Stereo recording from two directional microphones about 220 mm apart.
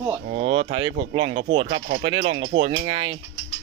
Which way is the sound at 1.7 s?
60° right (ahead or behind).